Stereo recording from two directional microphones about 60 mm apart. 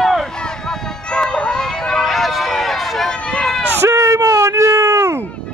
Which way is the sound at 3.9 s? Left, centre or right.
Right.